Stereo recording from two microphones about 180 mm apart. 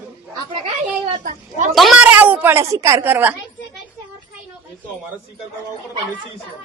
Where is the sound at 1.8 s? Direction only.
5° right (ahead or behind).